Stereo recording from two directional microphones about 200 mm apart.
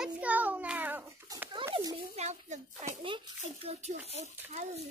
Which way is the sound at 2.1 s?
35° right (ahead or behind).